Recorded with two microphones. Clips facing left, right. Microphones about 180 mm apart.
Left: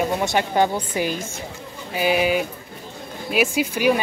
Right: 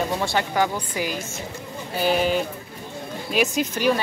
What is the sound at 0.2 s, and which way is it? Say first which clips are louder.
Speech: left 3 dB; 20° left (ahead or behind).